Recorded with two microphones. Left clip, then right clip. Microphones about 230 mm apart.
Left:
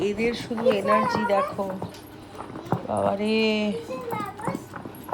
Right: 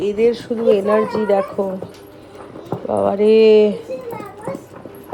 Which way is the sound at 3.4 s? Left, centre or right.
Right.